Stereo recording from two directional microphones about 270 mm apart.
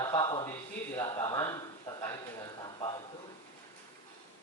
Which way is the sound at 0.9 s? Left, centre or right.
Centre.